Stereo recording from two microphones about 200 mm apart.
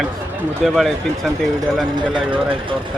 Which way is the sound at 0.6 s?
Centre (ahead or behind).